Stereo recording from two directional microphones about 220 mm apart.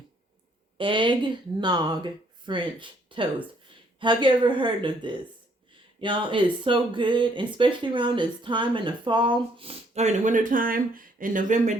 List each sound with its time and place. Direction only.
0.8 s speech: 20° right (ahead or behind)